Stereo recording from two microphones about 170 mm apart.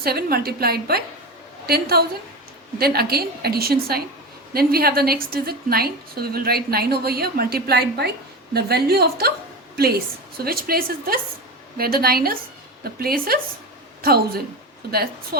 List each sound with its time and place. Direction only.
0.0 s a woman's voice: 65° right (ahead or behind)